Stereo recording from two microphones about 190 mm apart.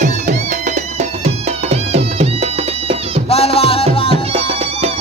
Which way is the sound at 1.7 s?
35° right (ahead or behind).